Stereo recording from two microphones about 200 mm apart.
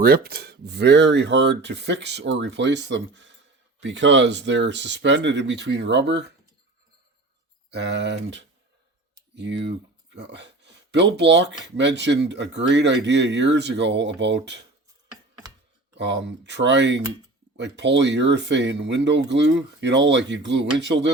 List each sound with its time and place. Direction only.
0.0 s speech: 50° right (ahead or behind)
7.7 s speech: 60° right (ahead or behind)
16.0 s speech: 60° right (ahead or behind)